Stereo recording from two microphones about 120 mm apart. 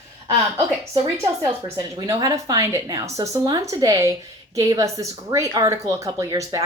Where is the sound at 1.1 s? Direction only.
25° right (ahead or behind).